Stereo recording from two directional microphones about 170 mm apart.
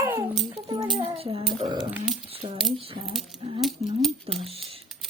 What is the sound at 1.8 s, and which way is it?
Speech, 5° right (ahead or behind).